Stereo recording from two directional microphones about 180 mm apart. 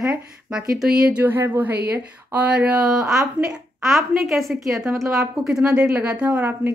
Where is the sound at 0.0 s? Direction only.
5° right (ahead or behind).